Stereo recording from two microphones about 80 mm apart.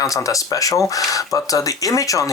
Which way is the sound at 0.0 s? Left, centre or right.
Left.